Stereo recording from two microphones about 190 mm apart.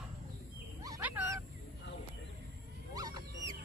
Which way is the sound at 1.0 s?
10° right (ahead or behind).